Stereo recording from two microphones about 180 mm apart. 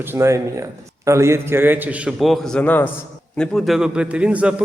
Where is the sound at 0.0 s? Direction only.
15° right (ahead or behind).